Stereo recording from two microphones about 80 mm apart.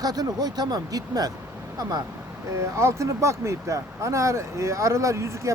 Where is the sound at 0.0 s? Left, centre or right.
Right.